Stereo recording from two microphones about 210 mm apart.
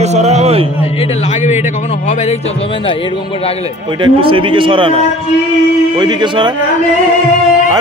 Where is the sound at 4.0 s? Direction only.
25° right (ahead or behind).